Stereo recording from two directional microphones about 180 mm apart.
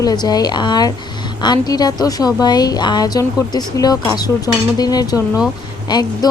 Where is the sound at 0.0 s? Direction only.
20° left (ahead or behind).